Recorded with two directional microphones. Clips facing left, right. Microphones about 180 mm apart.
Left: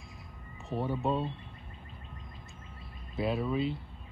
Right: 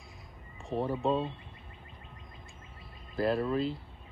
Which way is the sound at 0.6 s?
Centre (ahead or behind).